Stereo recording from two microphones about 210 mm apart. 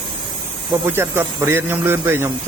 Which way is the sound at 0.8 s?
10° right (ahead or behind).